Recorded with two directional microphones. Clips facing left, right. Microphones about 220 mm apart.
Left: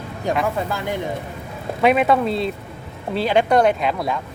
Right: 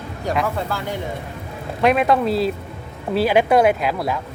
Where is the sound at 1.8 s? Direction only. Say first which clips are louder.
Even; centre (ahead or behind).